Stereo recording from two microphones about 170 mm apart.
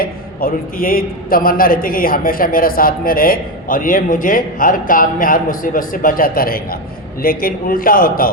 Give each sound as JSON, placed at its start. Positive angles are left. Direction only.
{"t": 0.0, "sound": "a man's voice", "side_deg": 60}